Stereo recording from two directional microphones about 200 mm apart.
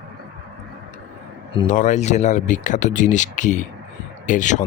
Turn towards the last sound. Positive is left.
turn(degrees=40)  # may be behind; listen again after turning